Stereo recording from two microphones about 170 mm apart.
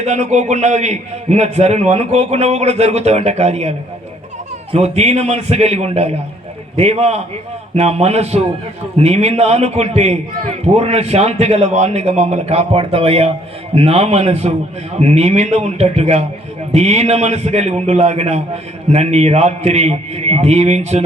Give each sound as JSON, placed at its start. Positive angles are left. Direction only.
{"t": 0.0, "sound": "a man's voice", "side_deg": -40}